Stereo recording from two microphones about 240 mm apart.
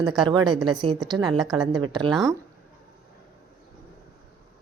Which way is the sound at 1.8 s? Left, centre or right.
Centre.